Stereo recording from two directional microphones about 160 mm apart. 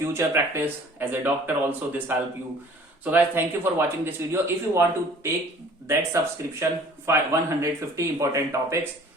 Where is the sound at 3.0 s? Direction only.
10° right (ahead or behind).